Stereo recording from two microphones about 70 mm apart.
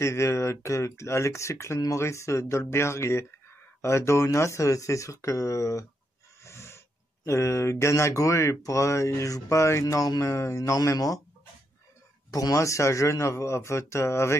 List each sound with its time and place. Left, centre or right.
0.0 s speech: left
6.4 s a sound: left
7.2 s speech: left
10.2 s speech: left
12.3 s speech: left